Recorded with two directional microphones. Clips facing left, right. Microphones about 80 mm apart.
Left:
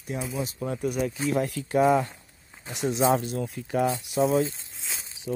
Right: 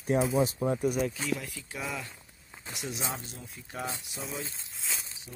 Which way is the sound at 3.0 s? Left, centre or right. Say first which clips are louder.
Left 15 dB; left.